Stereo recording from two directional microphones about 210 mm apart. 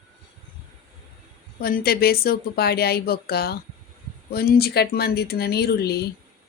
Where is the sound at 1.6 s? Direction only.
45° left (ahead or behind).